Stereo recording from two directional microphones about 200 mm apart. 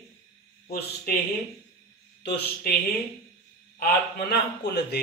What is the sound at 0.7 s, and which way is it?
Speech, 50° left (ahead or behind).